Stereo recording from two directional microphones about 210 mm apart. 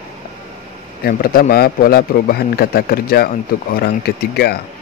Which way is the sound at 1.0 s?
45° left (ahead or behind).